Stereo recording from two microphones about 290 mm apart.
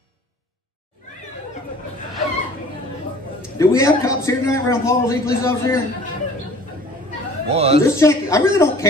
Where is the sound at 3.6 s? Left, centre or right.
Centre.